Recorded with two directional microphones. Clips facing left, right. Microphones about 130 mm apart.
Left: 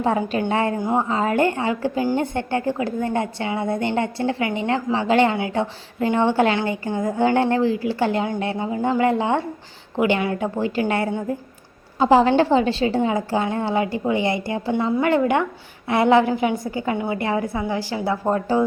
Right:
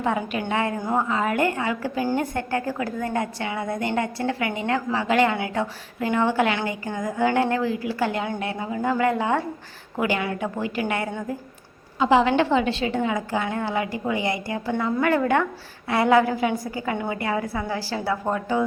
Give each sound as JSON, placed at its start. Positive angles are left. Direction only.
{"t": 0.0, "sound": "a woman's voice", "side_deg": 30}
{"t": 0.8, "sound": "a woman's voice", "side_deg": 20}
{"t": 18.3, "sound": "a woman's voice", "side_deg": 35}